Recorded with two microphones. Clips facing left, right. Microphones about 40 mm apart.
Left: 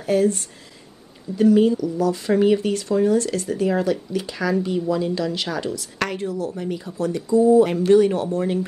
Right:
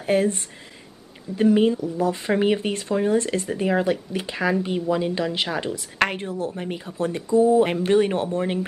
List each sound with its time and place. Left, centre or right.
0.0 s speech: right